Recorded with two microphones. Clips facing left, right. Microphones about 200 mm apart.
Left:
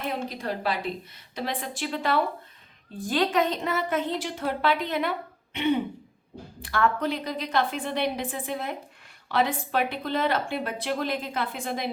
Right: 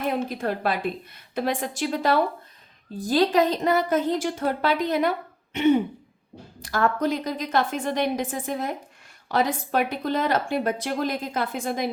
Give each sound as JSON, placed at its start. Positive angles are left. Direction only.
{"t": 0.3, "sound": "a woman's voice", "side_deg": -50}